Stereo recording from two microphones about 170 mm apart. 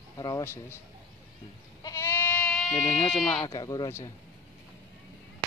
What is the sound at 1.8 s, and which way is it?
Goat, 15° left (ahead or behind).